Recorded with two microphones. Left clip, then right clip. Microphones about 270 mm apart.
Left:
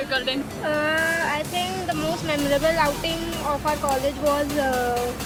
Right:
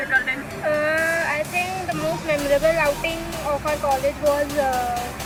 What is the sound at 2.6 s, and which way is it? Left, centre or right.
Speech, centre.